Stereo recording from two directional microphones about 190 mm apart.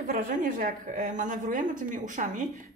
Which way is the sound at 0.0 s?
45° right (ahead or behind).